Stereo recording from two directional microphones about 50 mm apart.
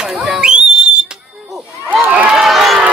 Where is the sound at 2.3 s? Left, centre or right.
Centre.